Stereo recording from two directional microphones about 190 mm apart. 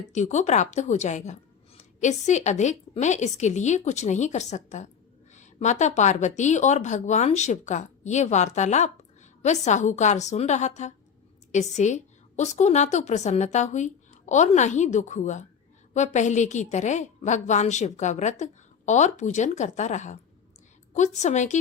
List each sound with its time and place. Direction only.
0.1 s a woman's voice: 40° left (ahead or behind)